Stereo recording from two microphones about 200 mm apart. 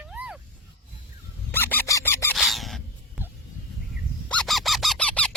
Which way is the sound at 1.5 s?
10° left (ahead or behind).